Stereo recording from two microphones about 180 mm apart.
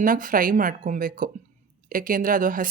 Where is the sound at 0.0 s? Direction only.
50° right (ahead or behind).